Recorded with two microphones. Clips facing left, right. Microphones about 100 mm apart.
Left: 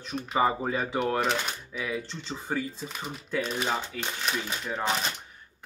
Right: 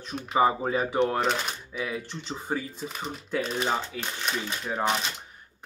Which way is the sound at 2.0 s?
15° right (ahead or behind).